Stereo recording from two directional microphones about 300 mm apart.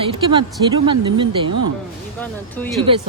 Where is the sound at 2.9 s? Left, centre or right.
Centre.